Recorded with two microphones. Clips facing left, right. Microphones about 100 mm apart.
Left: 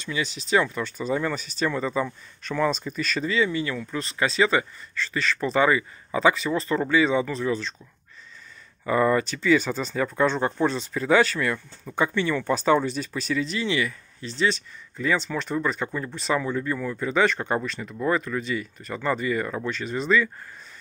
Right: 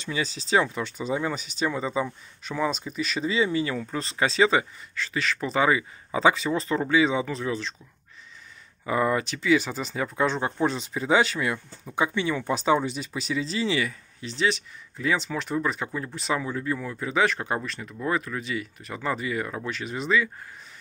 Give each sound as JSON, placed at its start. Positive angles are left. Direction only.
{"t": 0.0, "sound": "speech", "side_deg": -30}
{"t": 3.3, "sound": "speech", "side_deg": -25}
{"t": 6.1, "sound": "speech", "side_deg": -25}
{"t": 8.8, "sound": "speech", "side_deg": -10}
{"t": 13.4, "sound": "speech", "side_deg": -30}
{"t": 14.4, "sound": "speech", "side_deg": -10}